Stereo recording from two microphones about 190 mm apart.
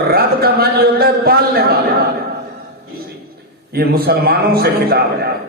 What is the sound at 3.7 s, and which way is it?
A man's voice, 55° right (ahead or behind).